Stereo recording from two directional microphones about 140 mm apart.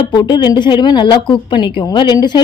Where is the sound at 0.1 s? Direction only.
35° left (ahead or behind).